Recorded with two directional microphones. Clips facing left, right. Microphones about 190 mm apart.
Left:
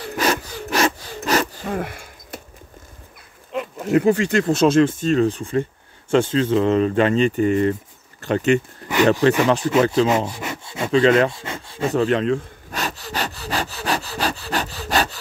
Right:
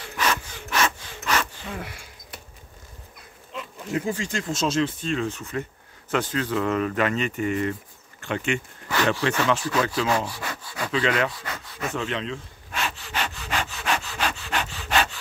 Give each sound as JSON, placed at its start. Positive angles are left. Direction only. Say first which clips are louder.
{"t": 0.0, "sound": "sawing", "louder": "left 5 dB", "side_deg": 40}
{"t": 3.5, "sound": "speech", "louder": "left 10 dB", "side_deg": 60}
{"t": 8.8, "sound": "a sound", "louder": "left 2 dB", "side_deg": 35}
{"t": 9.7, "sound": "rub", "louder": "left 7 dB", "side_deg": 25}